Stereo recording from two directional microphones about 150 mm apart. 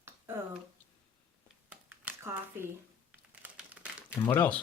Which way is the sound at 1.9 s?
15° right (ahead or behind).